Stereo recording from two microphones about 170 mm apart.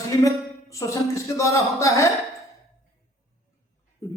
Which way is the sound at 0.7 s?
20° left (ahead or behind).